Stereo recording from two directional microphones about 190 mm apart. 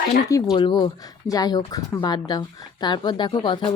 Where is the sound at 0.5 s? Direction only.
25° left (ahead or behind).